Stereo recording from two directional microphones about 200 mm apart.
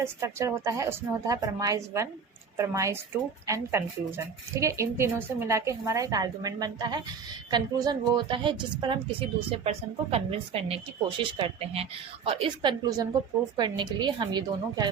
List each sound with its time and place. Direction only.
0.0 s a woman's voice: 15° right (ahead or behind)